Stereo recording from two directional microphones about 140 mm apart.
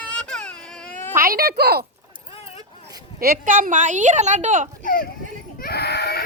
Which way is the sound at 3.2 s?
80° right.